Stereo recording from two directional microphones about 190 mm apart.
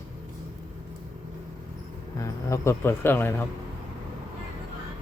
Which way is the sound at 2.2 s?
15° left (ahead or behind).